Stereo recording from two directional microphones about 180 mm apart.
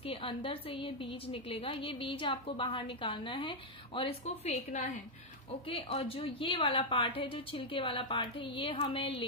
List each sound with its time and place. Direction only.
0.0 s a woman's voice: 30° left (ahead or behind)
5.7 s a woman's voice: 30° left (ahead or behind)